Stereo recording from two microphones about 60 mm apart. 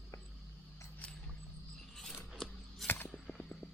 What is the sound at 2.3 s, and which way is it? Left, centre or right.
Scissors, centre.